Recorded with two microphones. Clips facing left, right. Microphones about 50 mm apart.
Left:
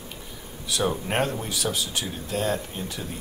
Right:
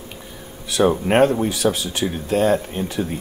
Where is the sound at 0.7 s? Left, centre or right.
Right.